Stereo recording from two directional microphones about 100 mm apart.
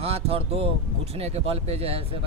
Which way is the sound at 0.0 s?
75° right (ahead or behind).